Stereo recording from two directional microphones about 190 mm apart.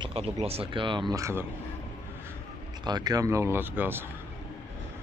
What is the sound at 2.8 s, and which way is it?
Speech, 20° right (ahead or behind).